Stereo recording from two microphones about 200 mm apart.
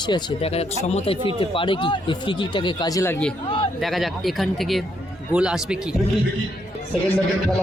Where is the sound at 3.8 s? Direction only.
Centre (ahead or behind).